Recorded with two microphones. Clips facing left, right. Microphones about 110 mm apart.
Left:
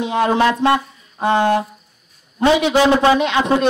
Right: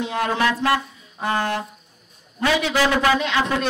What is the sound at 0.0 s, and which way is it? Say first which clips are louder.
Speech: left 6 dB; 20° left (ahead or behind).